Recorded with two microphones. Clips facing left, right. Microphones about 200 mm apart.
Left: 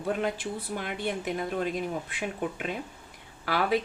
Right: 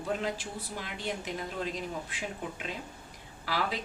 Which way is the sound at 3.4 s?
60° left (ahead or behind).